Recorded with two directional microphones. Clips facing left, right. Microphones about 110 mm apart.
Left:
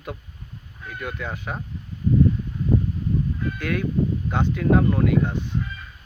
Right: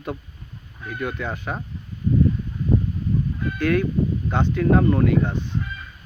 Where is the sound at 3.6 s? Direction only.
5° left (ahead or behind).